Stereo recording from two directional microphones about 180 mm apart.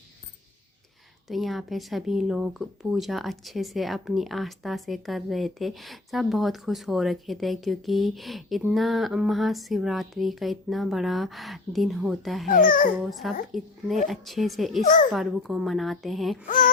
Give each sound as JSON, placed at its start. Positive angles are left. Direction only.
{"t": 1.3, "sound": "speech", "side_deg": 0}
{"t": 12.5, "sound": "speech", "side_deg": 50}
{"t": 13.0, "sound": "speech", "side_deg": 0}